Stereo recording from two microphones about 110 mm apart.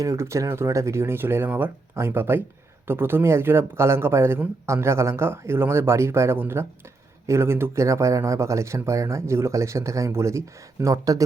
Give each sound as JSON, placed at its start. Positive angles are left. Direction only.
{"t": 0.0, "sound": "speech", "side_deg": -30}